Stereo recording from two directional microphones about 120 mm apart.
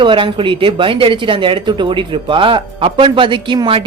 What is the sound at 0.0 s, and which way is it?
Speech, 45° right (ahead or behind).